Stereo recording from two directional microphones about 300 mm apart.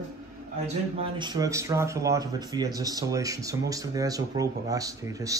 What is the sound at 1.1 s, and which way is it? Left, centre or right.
Speech, centre.